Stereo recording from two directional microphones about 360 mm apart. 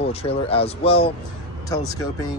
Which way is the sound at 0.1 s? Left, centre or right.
Centre.